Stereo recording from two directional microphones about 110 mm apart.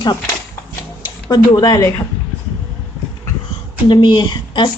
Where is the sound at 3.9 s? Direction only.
45° left (ahead or behind).